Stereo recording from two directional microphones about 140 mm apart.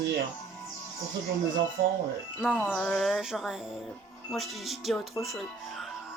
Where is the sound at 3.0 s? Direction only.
Centre (ahead or behind).